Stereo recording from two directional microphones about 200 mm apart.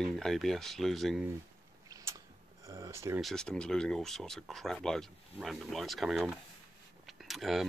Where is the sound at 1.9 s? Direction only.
15° right (ahead or behind).